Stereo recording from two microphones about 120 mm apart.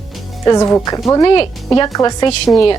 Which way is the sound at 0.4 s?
30° left (ahead or behind).